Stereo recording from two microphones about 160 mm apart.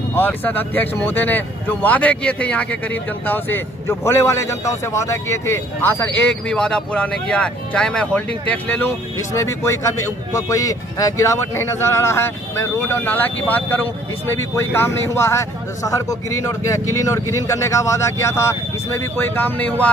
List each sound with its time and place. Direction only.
0.1 s speech: 10° left (ahead or behind)
9.3 s speech: 20° left (ahead or behind)